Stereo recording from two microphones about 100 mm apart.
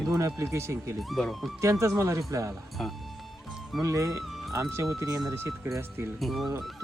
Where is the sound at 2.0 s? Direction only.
30° right (ahead or behind).